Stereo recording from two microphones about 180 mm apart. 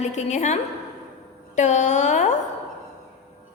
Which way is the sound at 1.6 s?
40° left (ahead or behind).